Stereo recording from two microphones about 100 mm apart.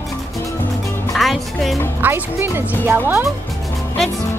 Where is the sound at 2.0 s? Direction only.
20° right (ahead or behind).